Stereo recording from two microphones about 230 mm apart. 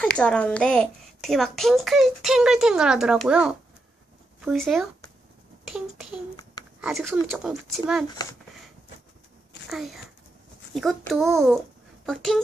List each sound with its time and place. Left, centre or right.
0.0 s a woman's voice: centre
8.1 s a child's voice: centre
9.7 s a woman's voice: centre